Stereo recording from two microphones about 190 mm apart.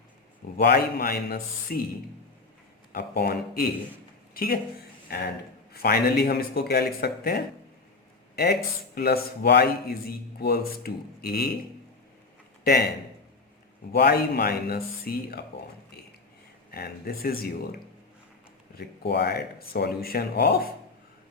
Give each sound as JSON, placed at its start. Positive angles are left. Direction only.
{"t": 0.5, "sound": "speech", "side_deg": 55}
{"t": 2.9, "sound": "speech", "side_deg": 50}
{"t": 9.0, "sound": "a man's voice", "side_deg": 60}
{"t": 13.9, "sound": "a man's voice", "side_deg": 55}
{"t": 16.7, "sound": "a man's voice", "side_deg": 55}